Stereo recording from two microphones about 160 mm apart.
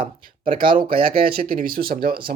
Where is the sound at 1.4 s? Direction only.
60° right (ahead or behind).